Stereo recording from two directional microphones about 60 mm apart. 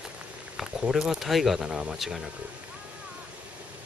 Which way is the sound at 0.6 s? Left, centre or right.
Centre.